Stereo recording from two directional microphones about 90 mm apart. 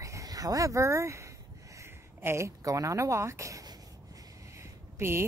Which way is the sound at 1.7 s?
30° right (ahead or behind).